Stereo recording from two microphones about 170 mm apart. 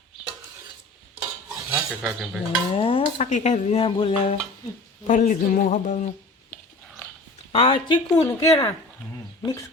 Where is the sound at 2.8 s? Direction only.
30° left (ahead or behind).